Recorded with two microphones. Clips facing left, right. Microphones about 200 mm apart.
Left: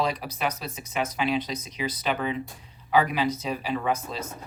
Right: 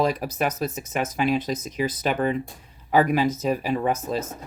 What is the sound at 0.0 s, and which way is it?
Speech, 50° right (ahead or behind).